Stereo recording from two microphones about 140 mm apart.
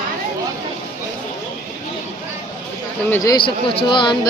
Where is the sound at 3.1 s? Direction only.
25° left (ahead or behind).